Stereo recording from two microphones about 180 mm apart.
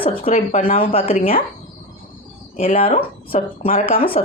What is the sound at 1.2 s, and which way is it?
Speech, 50° left (ahead or behind).